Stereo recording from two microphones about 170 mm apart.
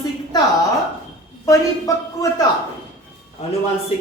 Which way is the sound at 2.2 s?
20° left (ahead or behind).